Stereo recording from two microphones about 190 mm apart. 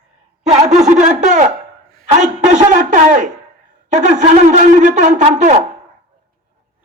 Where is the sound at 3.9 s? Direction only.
40° right (ahead or behind).